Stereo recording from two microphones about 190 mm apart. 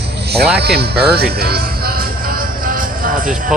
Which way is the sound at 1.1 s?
55° right (ahead or behind).